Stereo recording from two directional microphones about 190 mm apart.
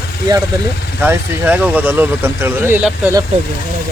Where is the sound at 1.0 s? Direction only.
10° right (ahead or behind).